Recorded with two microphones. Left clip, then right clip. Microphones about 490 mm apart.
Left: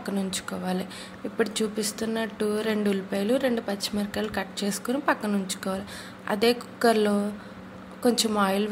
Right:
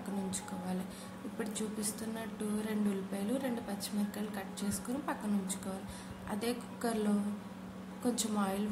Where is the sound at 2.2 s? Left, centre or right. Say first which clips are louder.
Left 14 dB; right.